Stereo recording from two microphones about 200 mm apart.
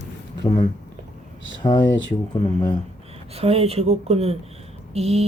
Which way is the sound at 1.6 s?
25° left (ahead or behind).